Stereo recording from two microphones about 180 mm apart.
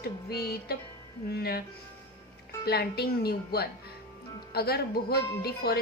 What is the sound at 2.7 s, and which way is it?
A woman's voice, 60° left (ahead or behind).